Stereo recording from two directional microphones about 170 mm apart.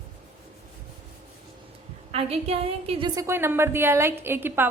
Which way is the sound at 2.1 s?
35° right (ahead or behind).